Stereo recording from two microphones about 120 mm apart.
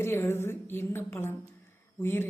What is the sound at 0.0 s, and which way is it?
A woman's voice, 20° left (ahead or behind).